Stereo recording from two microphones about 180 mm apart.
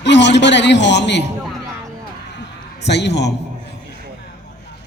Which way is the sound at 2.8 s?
70° left (ahead or behind).